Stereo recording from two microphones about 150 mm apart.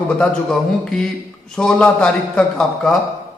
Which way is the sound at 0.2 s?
5° left (ahead or behind).